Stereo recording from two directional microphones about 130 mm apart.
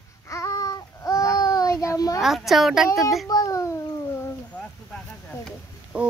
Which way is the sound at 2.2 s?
Centre (ahead or behind).